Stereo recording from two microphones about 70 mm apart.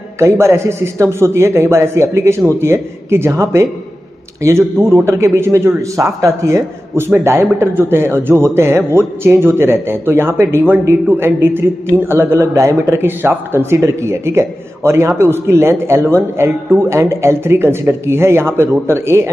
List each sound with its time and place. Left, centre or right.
0.2 s a man's voice: right
7.5 s a man's voice: right